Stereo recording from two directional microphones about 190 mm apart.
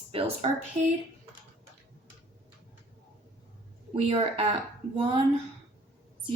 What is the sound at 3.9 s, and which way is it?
Speech, 30° right (ahead or behind).